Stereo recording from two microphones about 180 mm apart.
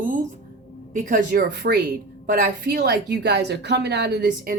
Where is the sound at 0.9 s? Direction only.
50° right (ahead or behind); by 1.8 s 65° right (ahead or behind).